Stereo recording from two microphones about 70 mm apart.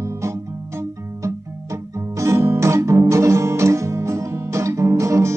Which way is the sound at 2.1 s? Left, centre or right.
Right.